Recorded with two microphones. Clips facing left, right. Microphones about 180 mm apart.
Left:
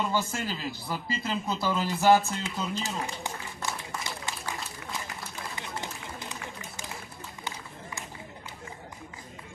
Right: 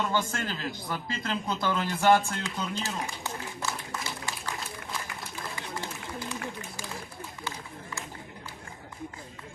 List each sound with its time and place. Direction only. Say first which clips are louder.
0.0 s speech: even; 10° left (ahead or behind)
2.8 s a sound: left 1 dB; 15° left (ahead or behind)
5.5 s run: even; 20° left (ahead or behind)
7.4 s run: even; 20° left (ahead or behind)